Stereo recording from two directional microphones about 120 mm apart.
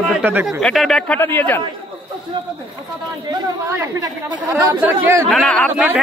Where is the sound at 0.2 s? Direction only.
15° right (ahead or behind).